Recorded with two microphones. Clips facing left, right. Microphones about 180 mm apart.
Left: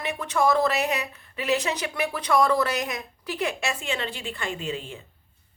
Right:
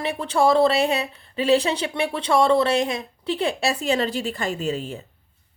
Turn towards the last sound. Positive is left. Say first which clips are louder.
# right 6 dB
turn(degrees=-40)  # may be behind; listen again after turning